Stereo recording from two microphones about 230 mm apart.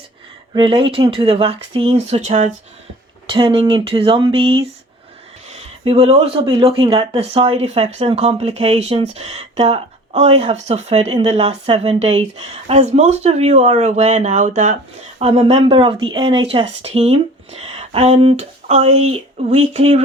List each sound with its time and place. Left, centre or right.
0.5 s speech: right